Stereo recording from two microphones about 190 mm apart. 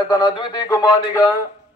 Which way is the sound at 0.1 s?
25° left (ahead or behind).